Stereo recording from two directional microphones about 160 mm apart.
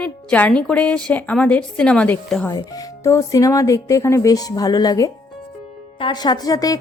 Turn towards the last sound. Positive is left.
turn(degrees=25)  # may be behind; listen again after turning